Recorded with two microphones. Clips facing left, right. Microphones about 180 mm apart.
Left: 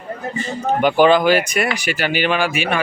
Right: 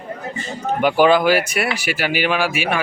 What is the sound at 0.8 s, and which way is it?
Speech, 5° right (ahead or behind).